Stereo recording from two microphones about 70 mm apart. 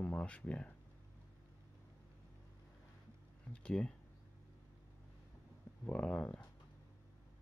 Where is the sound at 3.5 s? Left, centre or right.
Centre.